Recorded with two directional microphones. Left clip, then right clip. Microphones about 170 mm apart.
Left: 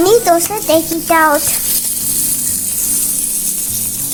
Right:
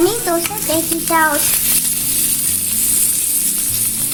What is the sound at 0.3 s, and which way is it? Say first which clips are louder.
A child's voice: left 7 dB; 80° left.